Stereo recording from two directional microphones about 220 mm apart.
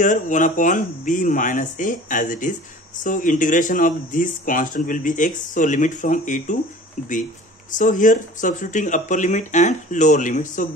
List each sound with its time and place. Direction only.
0.0 s speech: 35° left (ahead or behind)